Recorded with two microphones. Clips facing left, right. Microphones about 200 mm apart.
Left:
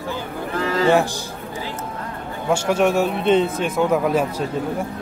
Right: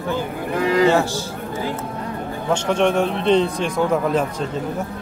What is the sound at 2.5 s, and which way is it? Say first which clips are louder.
A man's voice: even; 10° left (ahead or behind).